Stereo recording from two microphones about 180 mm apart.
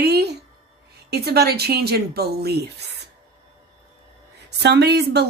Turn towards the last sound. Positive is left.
turn(degrees=-65)  # may be behind; listen again after turning